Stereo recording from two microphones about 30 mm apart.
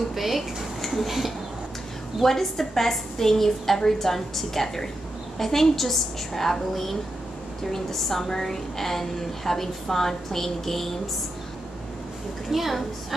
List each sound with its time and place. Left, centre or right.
0.1 s speech: centre
0.8 s a sound: centre
2.2 s a woman's voice: centre
12.4 s a woman's voice: centre